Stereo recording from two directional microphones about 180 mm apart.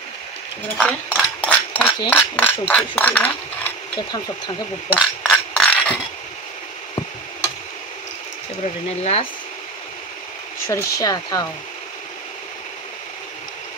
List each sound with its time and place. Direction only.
0.7 s speech: 5° left (ahead or behind)
4.9 s a sound: centre (ahead or behind)
8.8 s speech: 35° left (ahead or behind)
10.7 s speech: 15° left (ahead or behind)